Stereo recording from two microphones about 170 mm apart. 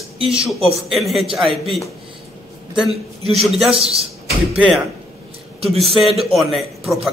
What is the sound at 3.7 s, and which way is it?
Speech, 35° right (ahead or behind).